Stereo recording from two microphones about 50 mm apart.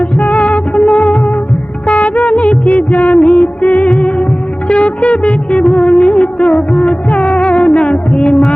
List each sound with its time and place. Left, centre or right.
0.2 s music: left
1.9 s music of bollywood: left
3.8 s music: centre
4.7 s music of bollywood: left